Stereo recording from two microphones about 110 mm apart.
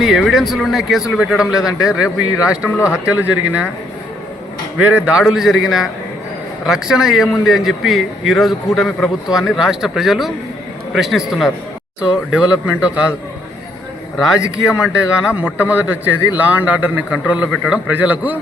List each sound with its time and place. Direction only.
0.0 s a man's voice: centre (ahead or behind)
2.6 s speech: 20° left (ahead or behind)
2.9 s a man's voice: 15° right (ahead or behind)
4.8 s a man's voice: 10° right (ahead or behind)
14.2 s a man's voice: 5° right (ahead or behind)